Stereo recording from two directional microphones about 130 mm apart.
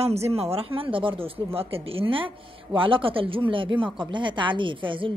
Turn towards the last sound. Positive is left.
turn(degrees=-40)  # may be behind; listen again after turning